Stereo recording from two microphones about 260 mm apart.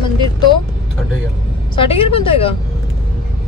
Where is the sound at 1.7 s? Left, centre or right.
Left.